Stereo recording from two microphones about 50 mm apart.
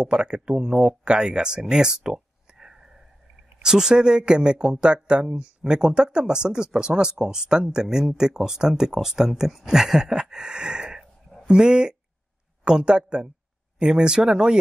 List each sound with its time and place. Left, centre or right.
0.0 s speech: centre